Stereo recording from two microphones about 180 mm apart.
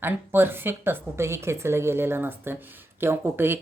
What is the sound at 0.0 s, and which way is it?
A woman's voice, 10° right (ahead or behind).